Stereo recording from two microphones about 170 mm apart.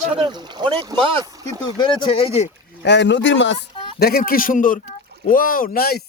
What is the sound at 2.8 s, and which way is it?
Speech, 90° left.